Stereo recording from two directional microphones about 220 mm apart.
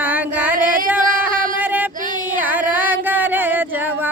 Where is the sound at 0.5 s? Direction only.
40° right (ahead or behind).